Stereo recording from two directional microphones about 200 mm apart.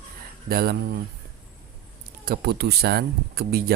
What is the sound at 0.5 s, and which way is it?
Speech, 50° right (ahead or behind).